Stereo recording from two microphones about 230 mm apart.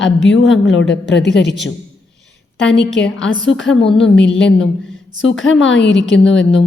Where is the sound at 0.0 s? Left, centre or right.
Left.